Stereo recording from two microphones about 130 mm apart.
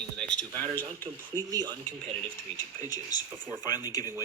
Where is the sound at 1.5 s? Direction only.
30° right (ahead or behind).